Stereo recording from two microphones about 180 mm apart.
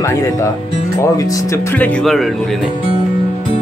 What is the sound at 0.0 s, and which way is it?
Speech, 15° left (ahead or behind).